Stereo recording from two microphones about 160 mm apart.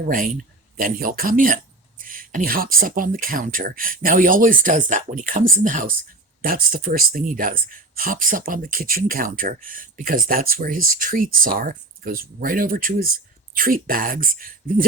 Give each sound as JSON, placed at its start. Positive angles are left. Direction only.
{"t": 0.8, "sound": "speech", "side_deg": -60}